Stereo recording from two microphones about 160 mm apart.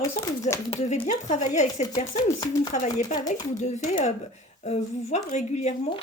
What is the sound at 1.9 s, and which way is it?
Speech, 30° left (ahead or behind).